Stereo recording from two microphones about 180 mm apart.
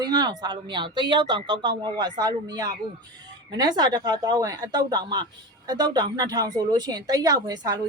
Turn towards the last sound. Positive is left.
turn(degrees=-20)  # may be behind; listen again after turning